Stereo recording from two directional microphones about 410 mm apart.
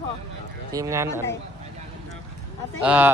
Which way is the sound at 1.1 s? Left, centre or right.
Centre.